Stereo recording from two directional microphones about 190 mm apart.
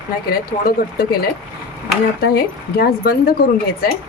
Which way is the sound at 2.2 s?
55° left (ahead or behind).